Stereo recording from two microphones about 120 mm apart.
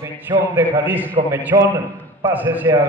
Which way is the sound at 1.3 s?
25° right (ahead or behind).